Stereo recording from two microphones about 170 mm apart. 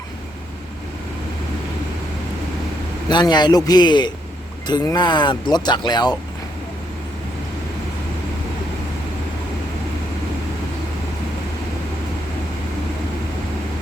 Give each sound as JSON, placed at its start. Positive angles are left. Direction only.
{"t": 3.1, "sound": "speech", "side_deg": 25}